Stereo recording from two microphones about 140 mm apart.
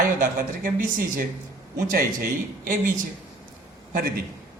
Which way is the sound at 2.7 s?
70° right (ahead or behind).